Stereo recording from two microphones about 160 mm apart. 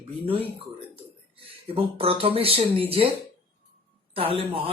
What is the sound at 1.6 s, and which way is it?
Speech, 35° right (ahead or behind).